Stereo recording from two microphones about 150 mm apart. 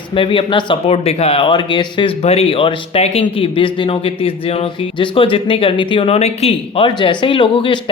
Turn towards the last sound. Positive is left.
turn(degrees=35)  # may be behind; listen again after turning